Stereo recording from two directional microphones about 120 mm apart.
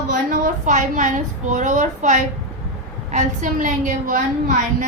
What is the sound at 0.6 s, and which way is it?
A woman's voice, 90° right.